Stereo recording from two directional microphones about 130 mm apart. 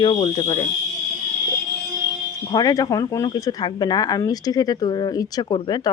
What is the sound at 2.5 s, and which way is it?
Speech, 30° left (ahead or behind).